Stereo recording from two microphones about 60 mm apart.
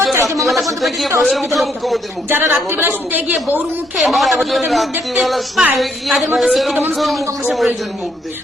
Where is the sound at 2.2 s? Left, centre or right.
Right.